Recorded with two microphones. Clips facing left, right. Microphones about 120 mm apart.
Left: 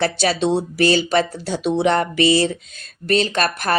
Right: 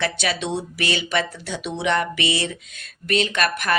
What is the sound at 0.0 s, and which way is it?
Speech, 35° left (ahead or behind).